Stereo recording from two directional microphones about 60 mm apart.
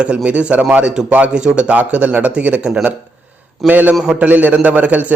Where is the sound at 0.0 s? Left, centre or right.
Centre.